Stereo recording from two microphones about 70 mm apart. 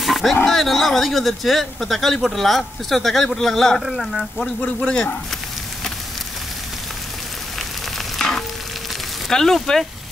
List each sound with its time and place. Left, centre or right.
0.0 s roaring cats: centre
0.5 s speech: centre
4.6 s speech: centre
8.2 s frying: centre
9.3 s speech: centre